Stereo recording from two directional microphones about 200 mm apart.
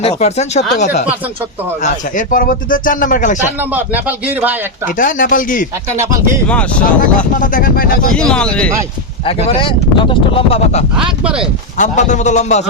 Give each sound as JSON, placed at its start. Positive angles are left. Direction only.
{"t": 0.0, "sound": "speech", "side_deg": 30}
{"t": 3.6, "sound": "a man's voice", "side_deg": -10}
{"t": 4.9, "sound": "speech", "side_deg": 40}
{"t": 6.5, "sound": "speech", "side_deg": 5}
{"t": 7.3, "sound": "speech", "side_deg": 45}
{"t": 8.1, "sound": "speech", "side_deg": 5}
{"t": 9.2, "sound": "speech", "side_deg": 30}
{"t": 11.0, "sound": "speech", "side_deg": -5}
{"t": 11.8, "sound": "speech", "side_deg": 35}